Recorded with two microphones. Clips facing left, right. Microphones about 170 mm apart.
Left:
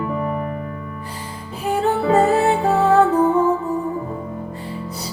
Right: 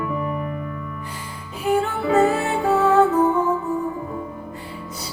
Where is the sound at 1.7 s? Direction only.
35° left (ahead or behind).